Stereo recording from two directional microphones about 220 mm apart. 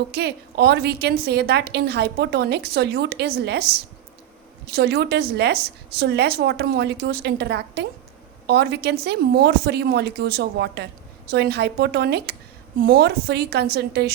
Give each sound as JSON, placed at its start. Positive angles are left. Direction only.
{"t": 0.1, "sound": "a woman's voice", "side_deg": -50}